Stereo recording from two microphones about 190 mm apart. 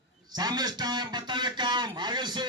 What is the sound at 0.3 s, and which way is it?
A man's voice, 20° right (ahead or behind).